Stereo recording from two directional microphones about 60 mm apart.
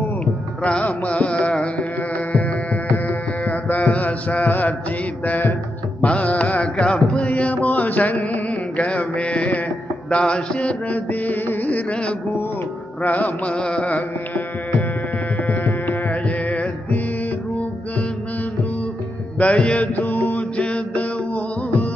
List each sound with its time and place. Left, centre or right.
0.7 s carnatic music: left
2.3 s music: left
5.2 s mantra: left
5.9 s music: left
10.0 s mantra: centre
11.4 s music: left
13.0 s carnatic music: left
15.4 s music: left
19.3 s mantra: left